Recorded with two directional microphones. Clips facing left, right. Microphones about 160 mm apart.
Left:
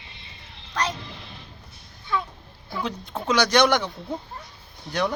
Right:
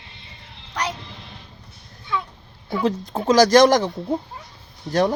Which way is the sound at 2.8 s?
40° right (ahead or behind).